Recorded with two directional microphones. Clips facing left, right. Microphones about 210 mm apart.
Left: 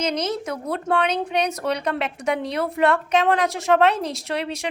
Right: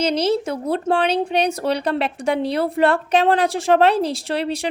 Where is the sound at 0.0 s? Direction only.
30° right (ahead or behind).